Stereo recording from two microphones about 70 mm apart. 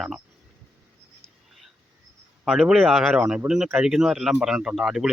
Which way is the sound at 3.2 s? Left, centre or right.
Centre.